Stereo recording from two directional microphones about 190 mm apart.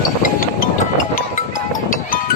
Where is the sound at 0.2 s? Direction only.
45° left (ahead or behind).